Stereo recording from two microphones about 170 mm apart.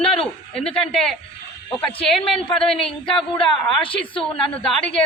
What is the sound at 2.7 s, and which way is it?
Speech, 5° left (ahead or behind).